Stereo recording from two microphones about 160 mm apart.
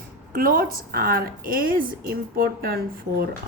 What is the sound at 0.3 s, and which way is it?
A woman's voice, 60° right (ahead or behind).